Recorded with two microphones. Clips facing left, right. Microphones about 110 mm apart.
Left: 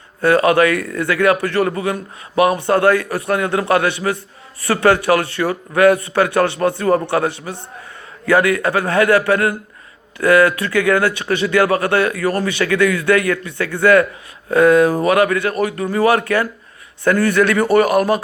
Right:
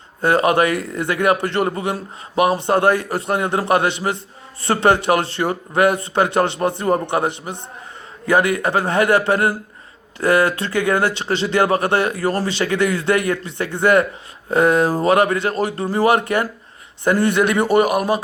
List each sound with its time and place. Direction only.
0.2 s a man's voice: 20° right (ahead or behind)